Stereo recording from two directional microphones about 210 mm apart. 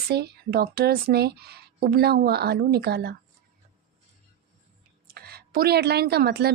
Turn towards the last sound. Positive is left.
turn(degrees=-50)  # may be behind; listen again after turning